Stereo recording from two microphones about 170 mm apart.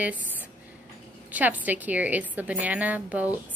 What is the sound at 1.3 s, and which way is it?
Speech, 10° right (ahead or behind).